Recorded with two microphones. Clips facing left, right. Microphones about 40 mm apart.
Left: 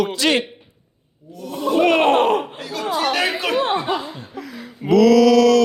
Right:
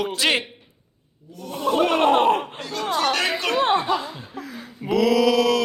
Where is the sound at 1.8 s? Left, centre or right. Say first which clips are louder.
Left 3 dB; left.